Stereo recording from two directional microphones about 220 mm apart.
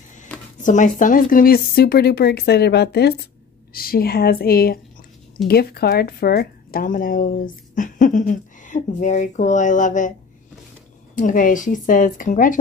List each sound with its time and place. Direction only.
0.6 s speech: 35° left (ahead or behind)
11.1 s speech: 35° left (ahead or behind)